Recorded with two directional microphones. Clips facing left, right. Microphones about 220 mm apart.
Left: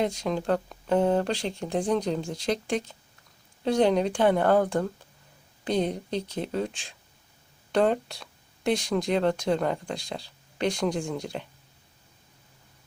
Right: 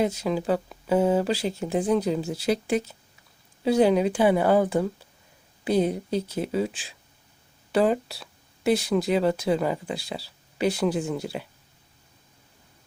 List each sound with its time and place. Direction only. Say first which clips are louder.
0.0 s a woman's voice: right 2 dB; 5° right (ahead or behind)